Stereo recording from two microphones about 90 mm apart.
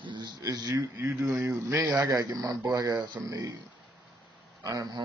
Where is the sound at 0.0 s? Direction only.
60° right (ahead or behind).